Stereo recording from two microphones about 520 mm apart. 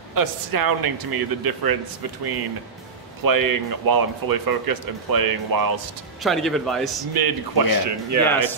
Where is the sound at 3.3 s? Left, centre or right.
Right.